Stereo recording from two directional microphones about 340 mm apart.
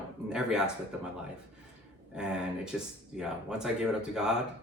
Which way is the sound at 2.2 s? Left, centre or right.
Centre.